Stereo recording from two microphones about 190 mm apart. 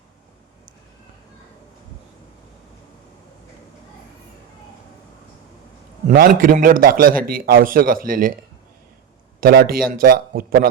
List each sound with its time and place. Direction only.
6.1 s a man's voice: 50° right (ahead or behind)
9.4 s a man's voice: 50° right (ahead or behind)